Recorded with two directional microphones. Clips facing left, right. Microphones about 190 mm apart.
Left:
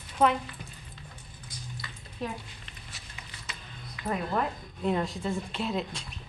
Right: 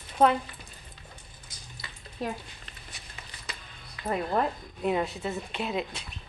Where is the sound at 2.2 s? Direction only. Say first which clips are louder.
Right 2 dB; 40° right (ahead or behind).